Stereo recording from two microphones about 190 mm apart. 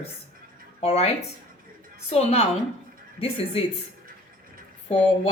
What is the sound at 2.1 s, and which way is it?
Speech, 30° left (ahead or behind).